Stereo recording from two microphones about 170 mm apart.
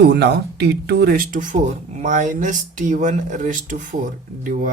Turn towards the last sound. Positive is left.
turn(degrees=-50)  # may be behind; listen again after turning